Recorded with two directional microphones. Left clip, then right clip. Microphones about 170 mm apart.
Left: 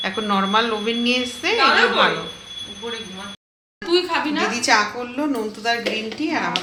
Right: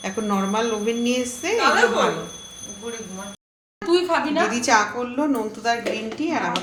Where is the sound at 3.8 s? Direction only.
65° right (ahead or behind).